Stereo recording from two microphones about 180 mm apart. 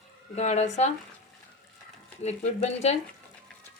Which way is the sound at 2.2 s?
40° left (ahead or behind).